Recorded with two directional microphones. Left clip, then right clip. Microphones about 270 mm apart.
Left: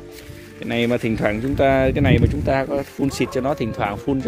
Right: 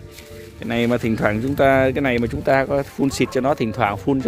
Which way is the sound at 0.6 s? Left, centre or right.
Centre.